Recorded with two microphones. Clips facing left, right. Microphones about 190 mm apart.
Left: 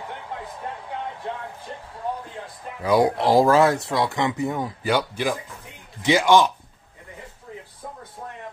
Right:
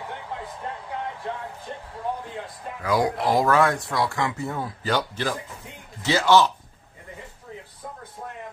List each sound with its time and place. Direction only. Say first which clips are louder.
2.8 s speech: left 4 dB; 25° left (ahead or behind)